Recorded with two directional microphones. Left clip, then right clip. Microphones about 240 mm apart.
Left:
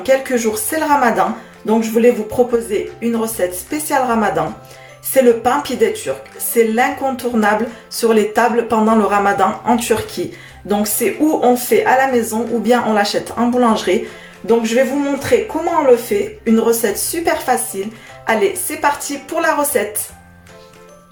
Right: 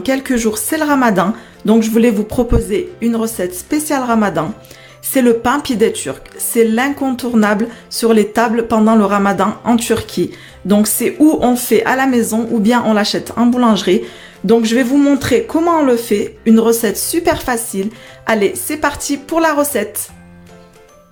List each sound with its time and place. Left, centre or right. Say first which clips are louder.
0.0 s a woman's voice: left 2 dB; right